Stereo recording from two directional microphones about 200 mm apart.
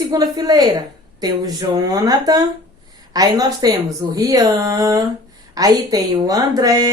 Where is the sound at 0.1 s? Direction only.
20° right (ahead or behind).